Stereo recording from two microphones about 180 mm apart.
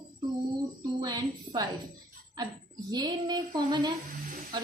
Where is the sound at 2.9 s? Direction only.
20° right (ahead or behind).